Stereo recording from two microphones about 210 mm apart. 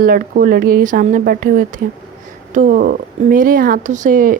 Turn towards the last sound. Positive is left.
turn(degrees=-40)  # may be behind; listen again after turning